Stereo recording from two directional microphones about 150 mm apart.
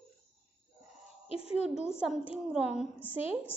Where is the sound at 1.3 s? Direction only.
40° left (ahead or behind).